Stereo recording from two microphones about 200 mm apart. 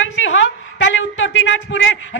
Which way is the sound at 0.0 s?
75° left (ahead or behind).